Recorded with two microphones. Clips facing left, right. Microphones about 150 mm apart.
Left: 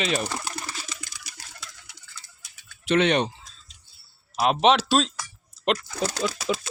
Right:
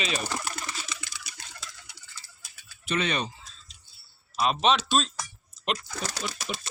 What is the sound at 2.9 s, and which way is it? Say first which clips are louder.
Speech: left 8 dB; 80° left.